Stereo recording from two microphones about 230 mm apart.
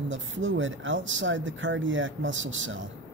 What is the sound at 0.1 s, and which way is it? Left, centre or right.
Speech, right.